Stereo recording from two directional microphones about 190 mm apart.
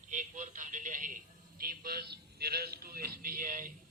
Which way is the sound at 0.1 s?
40° right (ahead or behind).